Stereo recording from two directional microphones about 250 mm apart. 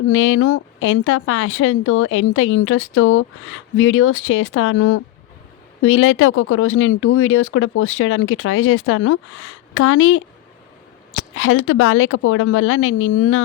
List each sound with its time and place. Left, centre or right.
0.1 s speech: left